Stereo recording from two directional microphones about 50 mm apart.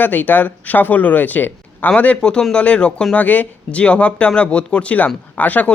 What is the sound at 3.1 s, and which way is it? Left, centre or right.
Speech, left.